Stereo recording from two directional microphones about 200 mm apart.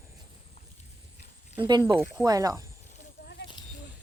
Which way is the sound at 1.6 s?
20° right (ahead or behind).